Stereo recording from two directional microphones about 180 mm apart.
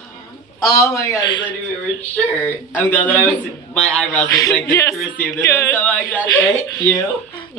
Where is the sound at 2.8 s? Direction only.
10° left (ahead or behind).